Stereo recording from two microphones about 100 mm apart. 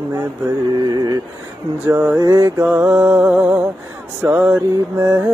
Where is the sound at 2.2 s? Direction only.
25° right (ahead or behind).